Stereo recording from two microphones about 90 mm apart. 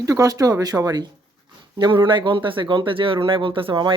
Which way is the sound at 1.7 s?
55° right (ahead or behind).